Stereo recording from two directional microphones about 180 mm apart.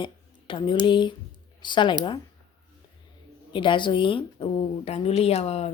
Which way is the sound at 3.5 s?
25° left (ahead or behind).